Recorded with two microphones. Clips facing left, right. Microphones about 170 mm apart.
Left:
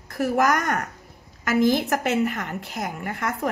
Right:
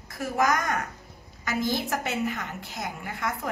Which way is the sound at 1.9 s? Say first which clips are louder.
Left 6 dB; 70° left (ahead or behind).